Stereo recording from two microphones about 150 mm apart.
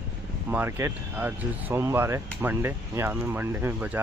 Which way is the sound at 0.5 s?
15° right (ahead or behind).